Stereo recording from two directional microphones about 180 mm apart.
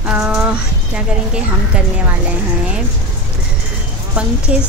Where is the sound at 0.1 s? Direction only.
5° right (ahead or behind).